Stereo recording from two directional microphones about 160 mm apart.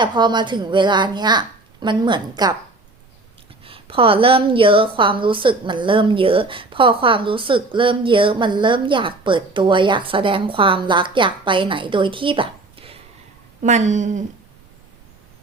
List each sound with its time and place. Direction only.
0.0 s a woman's voice: 30° right (ahead or behind)
3.6 s a woman's voice: 35° right (ahead or behind)
13.6 s a woman's voice: 50° right (ahead or behind)